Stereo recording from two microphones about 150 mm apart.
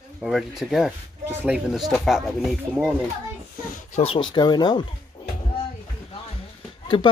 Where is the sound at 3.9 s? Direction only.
40° left (ahead or behind).